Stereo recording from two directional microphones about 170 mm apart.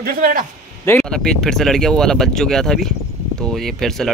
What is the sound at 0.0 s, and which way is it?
Speech, 55° right (ahead or behind).